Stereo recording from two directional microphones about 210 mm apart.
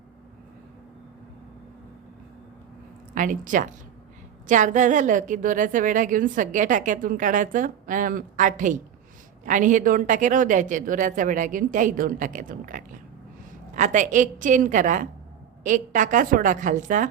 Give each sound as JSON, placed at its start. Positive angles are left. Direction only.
{"t": 3.2, "sound": "a woman's voice", "side_deg": -40}